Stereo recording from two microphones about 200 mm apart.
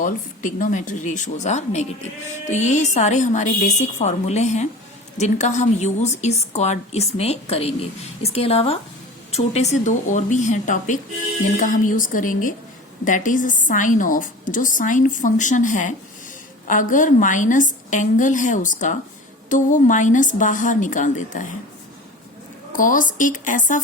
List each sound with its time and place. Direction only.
0.0 s speech: 40° left (ahead or behind)
22.7 s speech: 40° left (ahead or behind)